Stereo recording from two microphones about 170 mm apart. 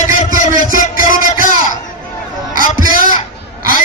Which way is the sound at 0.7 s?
50° left (ahead or behind).